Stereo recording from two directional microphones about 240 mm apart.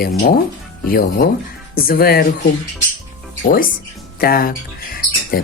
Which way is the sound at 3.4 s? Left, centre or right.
Left.